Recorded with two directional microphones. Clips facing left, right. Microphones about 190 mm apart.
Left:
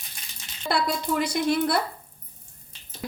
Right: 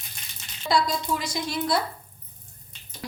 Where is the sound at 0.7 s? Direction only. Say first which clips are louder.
Right 1 dB; 60° left (ahead or behind).